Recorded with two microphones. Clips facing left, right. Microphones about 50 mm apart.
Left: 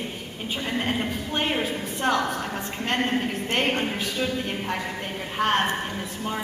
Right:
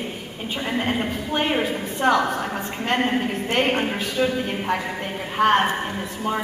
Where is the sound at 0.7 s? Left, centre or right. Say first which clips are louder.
Right 3 dB; centre.